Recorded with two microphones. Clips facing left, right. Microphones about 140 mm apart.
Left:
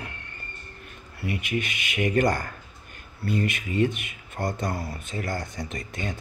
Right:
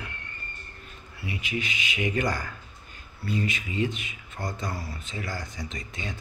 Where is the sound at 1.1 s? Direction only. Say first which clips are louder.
Left 4 dB; 55° left (ahead or behind).